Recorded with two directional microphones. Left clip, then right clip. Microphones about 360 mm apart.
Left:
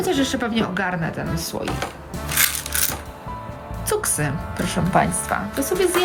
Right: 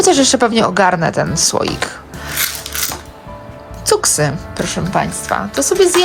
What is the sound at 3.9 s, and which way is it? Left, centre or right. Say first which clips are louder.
Speech: right 9 dB; centre.